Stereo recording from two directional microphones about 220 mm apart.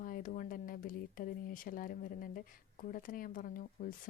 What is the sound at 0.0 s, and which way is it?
A woman's voice, 40° left (ahead or behind).